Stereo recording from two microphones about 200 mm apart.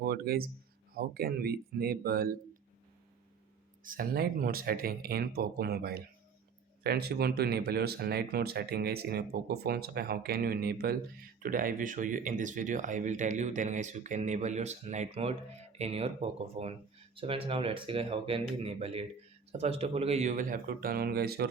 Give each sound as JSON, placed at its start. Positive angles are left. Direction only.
{"t": 0.0, "sound": "speech", "side_deg": -50}
{"t": 3.8, "sound": "speech", "side_deg": -45}